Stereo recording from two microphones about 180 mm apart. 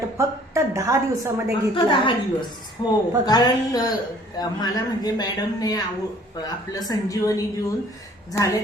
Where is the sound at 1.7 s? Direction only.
25° left (ahead or behind).